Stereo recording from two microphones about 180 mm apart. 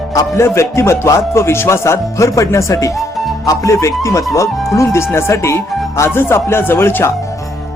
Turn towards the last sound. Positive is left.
turn(degrees=20)  # may be behind; listen again after turning